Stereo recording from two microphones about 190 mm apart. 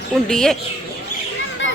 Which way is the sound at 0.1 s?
Centre (ahead or behind).